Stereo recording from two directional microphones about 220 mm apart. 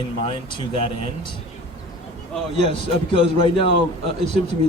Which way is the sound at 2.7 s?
25° left (ahead or behind).